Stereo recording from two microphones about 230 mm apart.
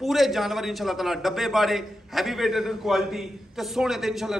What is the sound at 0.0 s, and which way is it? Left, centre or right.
A man's voice, centre.